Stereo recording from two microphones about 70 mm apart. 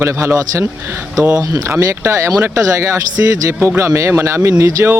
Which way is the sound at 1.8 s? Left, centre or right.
Right.